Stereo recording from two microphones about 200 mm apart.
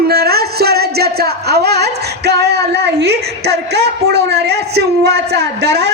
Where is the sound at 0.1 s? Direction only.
50° right (ahead or behind).